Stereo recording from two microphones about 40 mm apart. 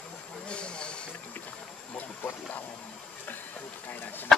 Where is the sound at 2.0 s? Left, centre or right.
Left.